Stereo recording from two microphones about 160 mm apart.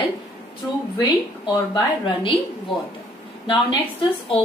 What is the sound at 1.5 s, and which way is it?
Speech, 25° left (ahead or behind).